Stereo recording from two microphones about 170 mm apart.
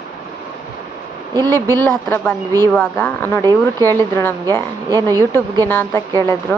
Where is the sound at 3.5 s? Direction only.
20° right (ahead or behind).